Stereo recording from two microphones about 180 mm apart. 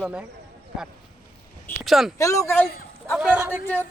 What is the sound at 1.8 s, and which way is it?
Speech, centre (ahead or behind).